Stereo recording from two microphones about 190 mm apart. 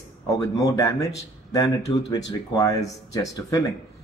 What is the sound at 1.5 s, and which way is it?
Speech, 20° left (ahead or behind).